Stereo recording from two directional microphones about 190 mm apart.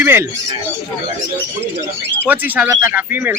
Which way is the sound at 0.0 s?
10° right (ahead or behind).